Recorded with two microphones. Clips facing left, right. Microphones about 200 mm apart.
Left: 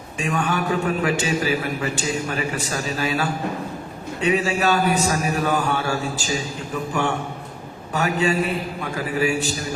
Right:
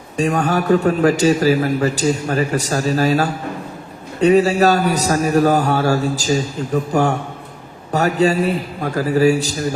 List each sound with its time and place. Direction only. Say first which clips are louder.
0.2 s a man's voice: right 6 dB; 40° right (ahead or behind)